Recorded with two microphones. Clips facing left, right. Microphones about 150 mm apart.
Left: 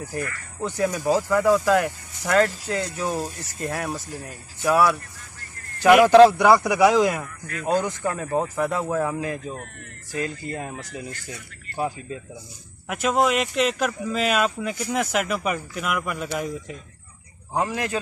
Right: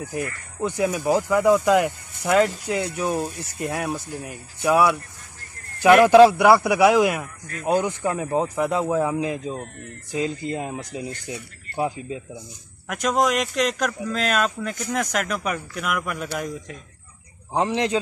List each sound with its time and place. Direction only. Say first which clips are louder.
0.0 s speech: right 1 dB; 15° right (ahead or behind)
6.0 s speech: even; 5° right (ahead or behind)
12.8 s speech: even; 5° left (ahead or behind)
17.6 s speech: right 3 dB; 25° right (ahead or behind)